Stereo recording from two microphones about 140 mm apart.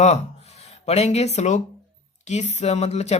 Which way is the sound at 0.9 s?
50° left (ahead or behind).